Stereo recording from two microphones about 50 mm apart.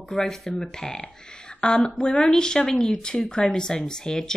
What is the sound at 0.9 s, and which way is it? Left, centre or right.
Speech, left.